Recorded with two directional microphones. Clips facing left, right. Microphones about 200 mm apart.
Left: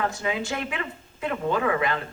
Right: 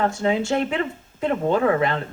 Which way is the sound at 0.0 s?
25° right (ahead or behind).